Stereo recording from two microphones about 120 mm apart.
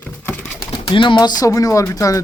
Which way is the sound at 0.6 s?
40° left (ahead or behind).